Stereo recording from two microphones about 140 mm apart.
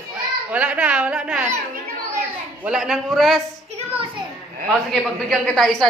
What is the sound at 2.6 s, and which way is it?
Speech, 5° right (ahead or behind).